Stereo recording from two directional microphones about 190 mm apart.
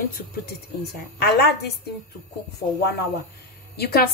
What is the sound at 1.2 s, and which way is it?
Speech, 60° left (ahead or behind).